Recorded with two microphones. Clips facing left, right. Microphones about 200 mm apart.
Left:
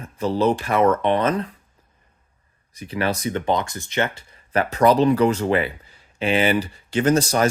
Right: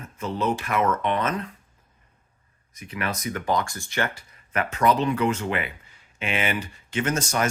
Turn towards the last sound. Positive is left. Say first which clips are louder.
# left 7 dB
turn(degrees=35)  # may be behind; listen again after turning